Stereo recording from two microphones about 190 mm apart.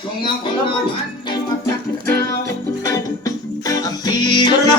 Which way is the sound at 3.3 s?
20° left (ahead or behind).